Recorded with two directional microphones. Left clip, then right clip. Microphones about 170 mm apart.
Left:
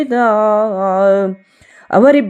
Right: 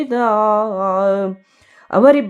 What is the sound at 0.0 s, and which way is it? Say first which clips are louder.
Speech: left 3 dB; 15° left (ahead or behind).